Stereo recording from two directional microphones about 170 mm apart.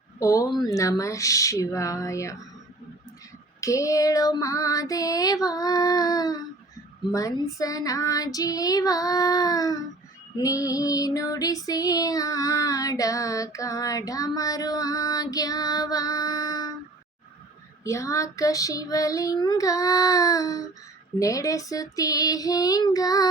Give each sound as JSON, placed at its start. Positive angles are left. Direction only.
{"t": 0.2, "sound": "female singing", "side_deg": 20}
{"t": 3.6, "sound": "female singing", "side_deg": 20}
{"t": 17.8, "sound": "female singing", "side_deg": 20}